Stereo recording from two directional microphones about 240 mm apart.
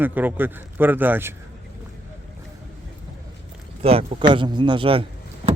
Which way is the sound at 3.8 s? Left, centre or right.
Right.